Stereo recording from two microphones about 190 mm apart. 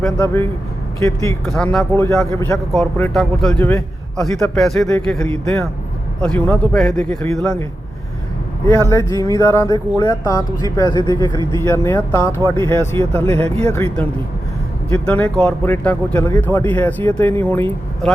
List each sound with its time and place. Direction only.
0.0 s speech: 5° left (ahead or behind)
1.5 s a man's voice: 5° left (ahead or behind)
8.6 s speech: 15° left (ahead or behind)
12.4 s speech: 20° right (ahead or behind)
12.7 s speech: 15° left (ahead or behind)